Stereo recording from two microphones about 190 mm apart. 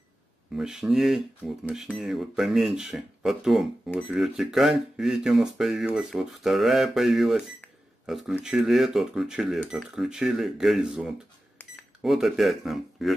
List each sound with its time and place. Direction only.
0.6 s speech: centre (ahead or behind)